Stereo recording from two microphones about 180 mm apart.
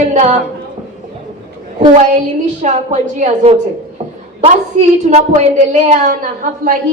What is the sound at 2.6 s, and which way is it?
A woman's voice, 40° right (ahead or behind).